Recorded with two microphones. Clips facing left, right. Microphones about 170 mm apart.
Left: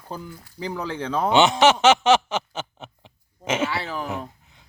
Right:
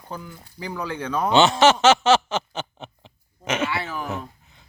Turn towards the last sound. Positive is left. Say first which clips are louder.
# left 1 dB
turn(degrees=30)  # may be behind; listen again after turning